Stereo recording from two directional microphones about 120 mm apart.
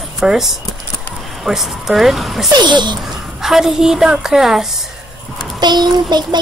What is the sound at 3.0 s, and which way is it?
A woman's voice, 5° right (ahead or behind).